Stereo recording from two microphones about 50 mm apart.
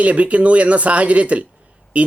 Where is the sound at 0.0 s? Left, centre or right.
Right.